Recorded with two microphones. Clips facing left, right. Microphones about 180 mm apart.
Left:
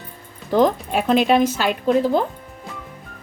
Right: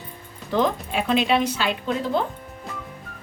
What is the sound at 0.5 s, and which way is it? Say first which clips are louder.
Speech: left 5 dB; 40° left (ahead or behind).